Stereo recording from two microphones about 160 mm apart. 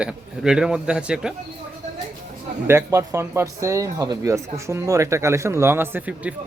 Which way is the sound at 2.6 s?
15° right (ahead or behind).